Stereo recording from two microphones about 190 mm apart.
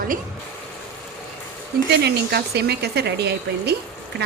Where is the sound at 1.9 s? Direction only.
60° right (ahead or behind).